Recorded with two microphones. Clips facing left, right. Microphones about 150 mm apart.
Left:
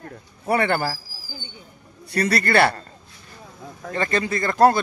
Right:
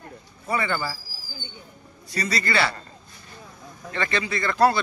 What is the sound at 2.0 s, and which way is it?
Speech, 60° left (ahead or behind).